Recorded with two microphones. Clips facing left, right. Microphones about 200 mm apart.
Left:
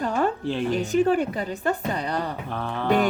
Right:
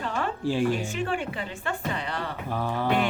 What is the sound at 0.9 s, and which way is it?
A woman's voice, 40° left (ahead or behind).